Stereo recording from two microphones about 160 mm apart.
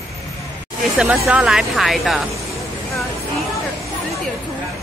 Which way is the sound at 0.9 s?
5° right (ahead or behind).